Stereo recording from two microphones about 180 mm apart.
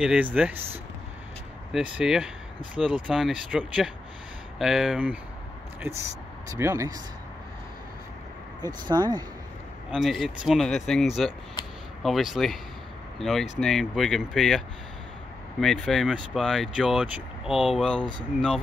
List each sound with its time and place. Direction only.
0.0 s speech: 5° right (ahead or behind)
1.7 s speech: 5° right (ahead or behind)
5.8 s speech: 15° right (ahead or behind)
8.5 s speech: 20° right (ahead or behind)
9.8 s speech: centre (ahead or behind)
11.6 s a sound: 25° left (ahead or behind)
12.0 s speech: centre (ahead or behind)
15.6 s speech: centre (ahead or behind)